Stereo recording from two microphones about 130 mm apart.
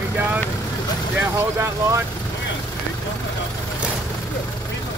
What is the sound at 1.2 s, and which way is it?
Speech, 20° right (ahead or behind).